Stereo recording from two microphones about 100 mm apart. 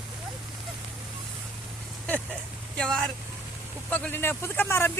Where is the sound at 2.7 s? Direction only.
10° left (ahead or behind).